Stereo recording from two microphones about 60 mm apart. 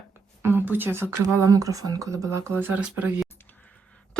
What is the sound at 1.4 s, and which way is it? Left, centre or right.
Speech, right.